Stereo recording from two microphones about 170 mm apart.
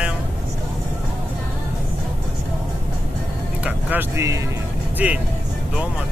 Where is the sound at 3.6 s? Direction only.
10° right (ahead or behind).